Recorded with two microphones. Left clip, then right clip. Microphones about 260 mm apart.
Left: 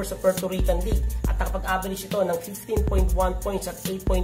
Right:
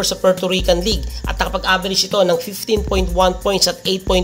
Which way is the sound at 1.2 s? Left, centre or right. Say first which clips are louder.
Right 10 dB; right.